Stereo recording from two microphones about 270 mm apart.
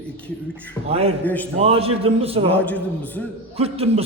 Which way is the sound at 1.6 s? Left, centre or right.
Right.